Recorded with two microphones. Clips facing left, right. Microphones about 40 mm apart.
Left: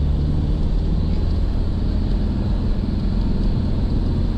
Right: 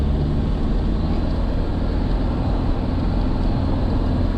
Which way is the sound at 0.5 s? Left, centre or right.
Right.